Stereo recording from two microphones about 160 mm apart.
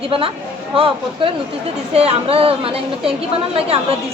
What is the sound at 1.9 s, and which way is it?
Speech, 40° right (ahead or behind).